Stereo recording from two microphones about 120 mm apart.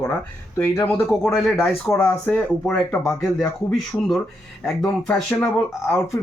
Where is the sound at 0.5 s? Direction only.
25° left (ahead or behind).